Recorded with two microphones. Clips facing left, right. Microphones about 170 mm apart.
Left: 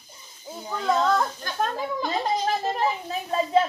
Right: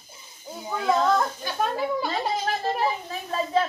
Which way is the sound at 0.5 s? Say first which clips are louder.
Right 1 dB; 10° right (ahead or behind).